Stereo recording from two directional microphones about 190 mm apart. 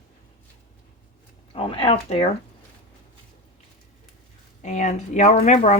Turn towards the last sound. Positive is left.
turn(degrees=35)  # may be behind; listen again after turning